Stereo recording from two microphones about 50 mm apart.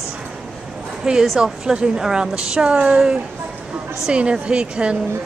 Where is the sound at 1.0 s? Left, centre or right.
Centre.